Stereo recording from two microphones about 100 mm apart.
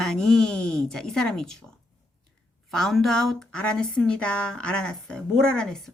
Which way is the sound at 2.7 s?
5° left (ahead or behind).